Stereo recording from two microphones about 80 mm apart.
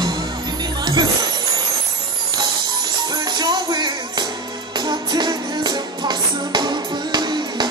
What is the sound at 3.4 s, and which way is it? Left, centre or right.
Music, right.